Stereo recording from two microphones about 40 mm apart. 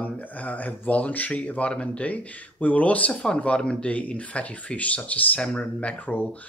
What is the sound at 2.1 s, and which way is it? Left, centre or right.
Speech, left.